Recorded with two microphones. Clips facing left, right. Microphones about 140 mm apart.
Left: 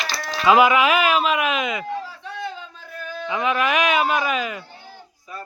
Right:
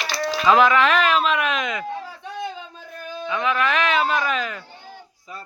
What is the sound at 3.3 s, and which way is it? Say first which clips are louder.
Speech: left 1 dB; 20° left (ahead or behind).